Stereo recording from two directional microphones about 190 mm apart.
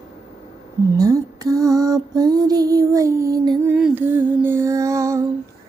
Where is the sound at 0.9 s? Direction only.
20° right (ahead or behind).